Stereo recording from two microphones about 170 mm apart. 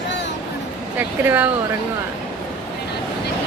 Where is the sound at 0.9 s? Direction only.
10° right (ahead or behind).